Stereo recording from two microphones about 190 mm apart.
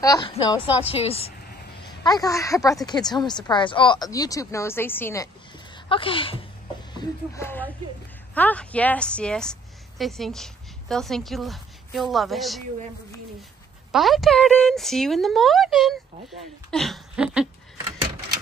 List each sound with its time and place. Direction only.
0.0 s speech: 20° left (ahead or behind)
1.9 s speech: 20° left (ahead or behind)
5.9 s speech: 25° left (ahead or behind)
6.9 s music: 25° left (ahead or behind)
7.4 s a woman's voice: 10° left (ahead or behind)
13.9 s a woman's voice: centre (ahead or behind)